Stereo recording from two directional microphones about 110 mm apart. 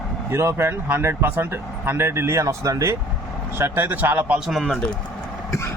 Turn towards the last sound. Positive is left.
turn(degrees=0)  # may be behind; listen again after turning